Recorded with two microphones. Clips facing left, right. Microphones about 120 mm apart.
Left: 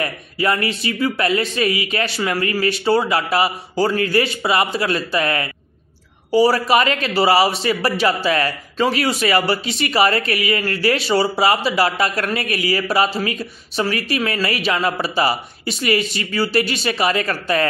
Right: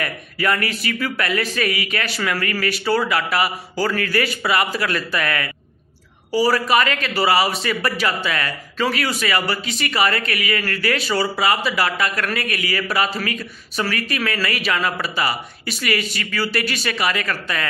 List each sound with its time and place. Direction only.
0.0 s speech: 25° left (ahead or behind)